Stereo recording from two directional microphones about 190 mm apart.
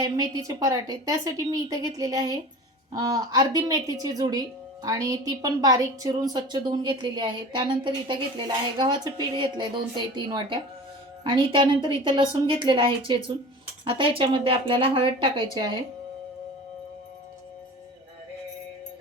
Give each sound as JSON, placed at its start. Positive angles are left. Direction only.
{"t": 0.0, "sound": "a woman's voice", "side_deg": -20}